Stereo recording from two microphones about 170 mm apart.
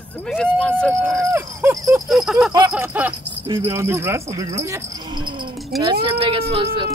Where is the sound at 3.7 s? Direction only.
15° right (ahead or behind).